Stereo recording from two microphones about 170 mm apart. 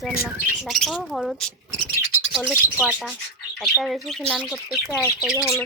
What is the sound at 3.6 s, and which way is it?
Speech, centre (ahead or behind).